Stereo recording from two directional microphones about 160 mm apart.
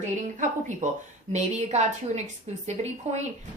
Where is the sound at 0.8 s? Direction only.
55° right (ahead or behind).